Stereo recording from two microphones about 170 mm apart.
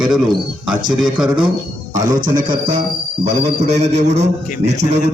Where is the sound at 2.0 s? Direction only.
50° right (ahead or behind).